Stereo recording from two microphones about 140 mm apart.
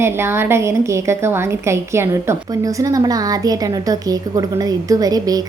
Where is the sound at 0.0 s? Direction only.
15° right (ahead or behind).